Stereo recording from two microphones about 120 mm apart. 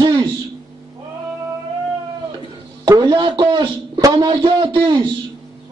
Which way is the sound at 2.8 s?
35° right (ahead or behind).